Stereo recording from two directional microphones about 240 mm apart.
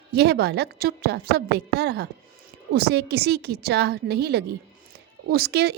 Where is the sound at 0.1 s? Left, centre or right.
Right.